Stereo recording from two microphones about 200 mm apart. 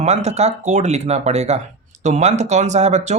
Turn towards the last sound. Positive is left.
turn(degrees=-35)  # may be behind; listen again after turning